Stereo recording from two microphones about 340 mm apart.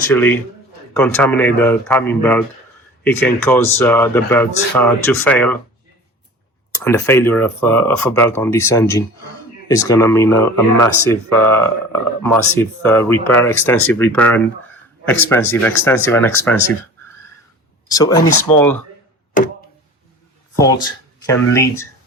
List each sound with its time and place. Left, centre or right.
0.1 s speech: centre
6.7 s speech: centre
17.8 s speech: centre
21.2 s speech: centre